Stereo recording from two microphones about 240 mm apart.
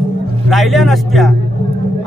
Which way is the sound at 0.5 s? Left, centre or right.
Centre.